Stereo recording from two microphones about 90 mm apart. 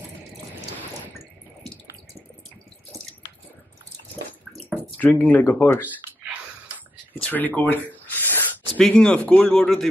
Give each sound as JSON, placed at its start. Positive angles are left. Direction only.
{"t": 4.7, "sound": "drip", "side_deg": 20}
{"t": 5.2, "sound": "speech", "side_deg": 20}
{"t": 7.2, "sound": "spray", "side_deg": 20}
{"t": 8.7, "sound": "speech", "side_deg": 10}